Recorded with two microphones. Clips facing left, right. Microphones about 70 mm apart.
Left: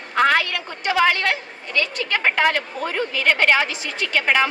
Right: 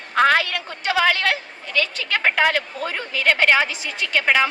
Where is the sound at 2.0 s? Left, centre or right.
Centre.